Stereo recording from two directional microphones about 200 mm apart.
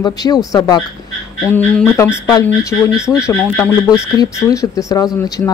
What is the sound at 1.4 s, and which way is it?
Speech, 10° left (ahead or behind).